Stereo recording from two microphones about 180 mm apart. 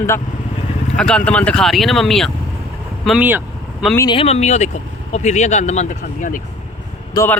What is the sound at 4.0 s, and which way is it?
Speech, 30° left (ahead or behind).